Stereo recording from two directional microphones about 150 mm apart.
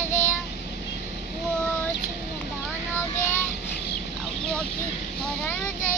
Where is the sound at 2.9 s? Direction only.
15° left (ahead or behind).